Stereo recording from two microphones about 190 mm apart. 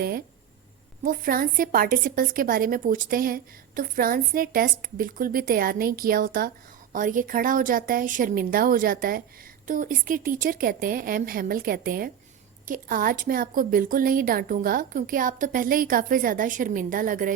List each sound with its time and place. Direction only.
1.0 s a woman's voice: 50° right (ahead or behind)